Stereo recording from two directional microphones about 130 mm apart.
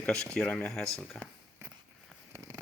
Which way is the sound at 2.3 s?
30° right (ahead or behind).